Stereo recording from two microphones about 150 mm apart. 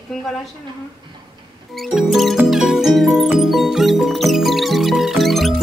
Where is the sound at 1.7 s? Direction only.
Centre (ahead or behind).